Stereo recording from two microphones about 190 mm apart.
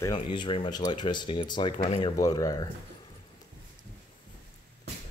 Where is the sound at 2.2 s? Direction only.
20° left (ahead or behind).